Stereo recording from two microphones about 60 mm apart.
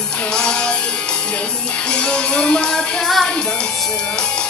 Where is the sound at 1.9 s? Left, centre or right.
Centre.